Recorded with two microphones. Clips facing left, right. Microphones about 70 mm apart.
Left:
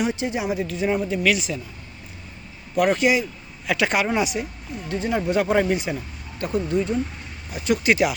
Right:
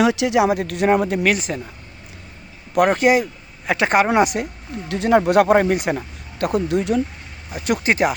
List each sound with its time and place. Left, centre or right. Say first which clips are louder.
0.0 s speech: right 8 dB; right
1.2 s speech: right 2 dB; right
2.7 s speech: right 4 dB; right
4.1 s speech: right 6 dB; right
7.5 s speech: right 1 dB; right
7.9 s speech: right 1 dB; right